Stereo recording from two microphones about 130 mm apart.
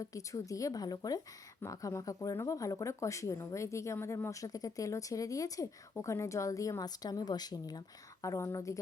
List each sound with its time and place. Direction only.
0.0 s speech: 25° left (ahead or behind)